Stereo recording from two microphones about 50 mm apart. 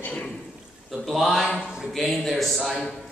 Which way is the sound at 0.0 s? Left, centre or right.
Left.